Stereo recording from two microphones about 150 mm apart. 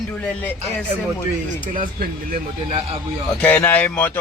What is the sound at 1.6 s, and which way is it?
Speech, 65° right (ahead or behind).